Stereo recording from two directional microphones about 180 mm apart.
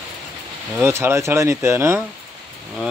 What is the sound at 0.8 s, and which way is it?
Speech, 10° right (ahead or behind).